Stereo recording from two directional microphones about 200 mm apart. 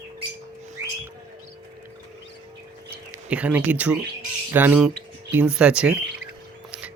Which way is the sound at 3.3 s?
5° right (ahead or behind).